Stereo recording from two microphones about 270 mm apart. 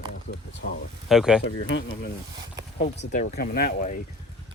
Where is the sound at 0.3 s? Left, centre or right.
Left.